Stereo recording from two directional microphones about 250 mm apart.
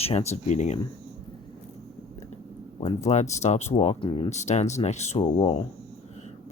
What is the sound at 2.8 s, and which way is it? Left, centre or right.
Speech, left.